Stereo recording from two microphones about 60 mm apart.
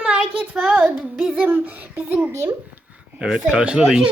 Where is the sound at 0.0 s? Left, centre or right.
Centre.